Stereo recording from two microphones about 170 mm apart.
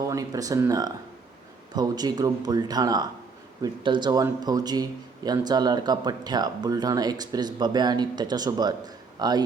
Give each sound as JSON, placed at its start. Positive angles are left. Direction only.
{"t": 0.0, "sound": "speech", "side_deg": -20}